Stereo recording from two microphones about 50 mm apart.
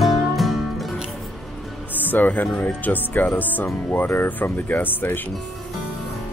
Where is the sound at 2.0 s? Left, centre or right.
Left.